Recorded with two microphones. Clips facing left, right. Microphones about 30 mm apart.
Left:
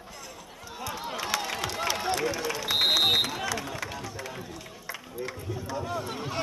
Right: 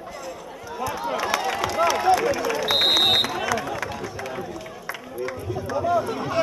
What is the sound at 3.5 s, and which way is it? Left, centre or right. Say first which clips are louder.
Run: right 7 dB; centre.